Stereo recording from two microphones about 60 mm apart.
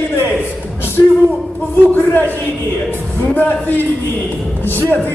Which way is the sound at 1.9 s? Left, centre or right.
Left.